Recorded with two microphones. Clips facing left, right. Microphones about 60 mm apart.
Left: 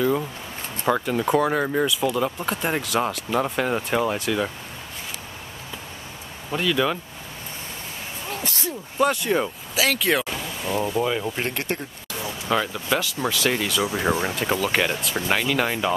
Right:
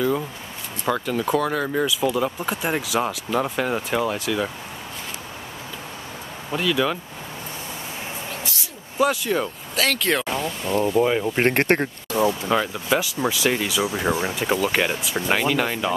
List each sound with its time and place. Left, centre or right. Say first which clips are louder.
0.8 s speech: left 1 dB; centre
6.5 s speech: even; centre
8.9 s speech: even; centre
11.3 s speech: right 8 dB; right
12.4 s speech: right 2 dB; centre